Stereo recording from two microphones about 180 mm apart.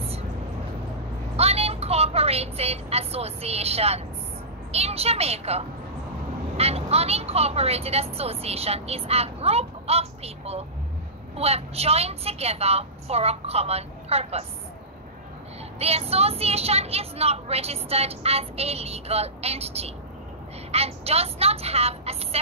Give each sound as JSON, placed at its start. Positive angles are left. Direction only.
{"t": 1.3, "sound": "a sound", "side_deg": -35}
{"t": 4.7, "sound": "speech", "side_deg": -35}
{"t": 15.8, "sound": "speech", "side_deg": -35}